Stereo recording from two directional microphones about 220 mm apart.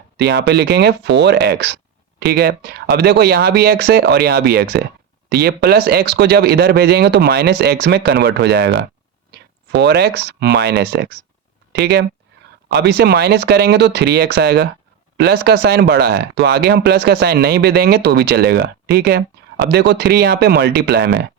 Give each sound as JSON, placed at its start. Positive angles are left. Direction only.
{"t": 0.2, "sound": "speech", "side_deg": -50}